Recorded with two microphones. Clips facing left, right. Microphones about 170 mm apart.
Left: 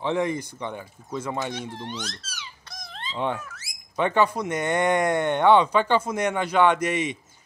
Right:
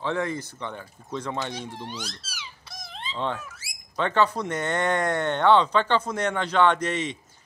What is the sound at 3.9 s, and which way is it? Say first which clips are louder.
Speech: left 1 dB; 15° left (ahead or behind).